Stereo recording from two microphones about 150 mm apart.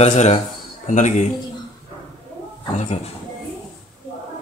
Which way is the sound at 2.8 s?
45° left (ahead or behind).